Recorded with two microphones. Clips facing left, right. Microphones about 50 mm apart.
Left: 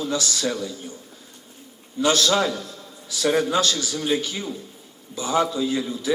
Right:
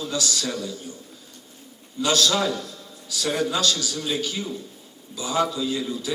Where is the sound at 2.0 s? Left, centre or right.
Left.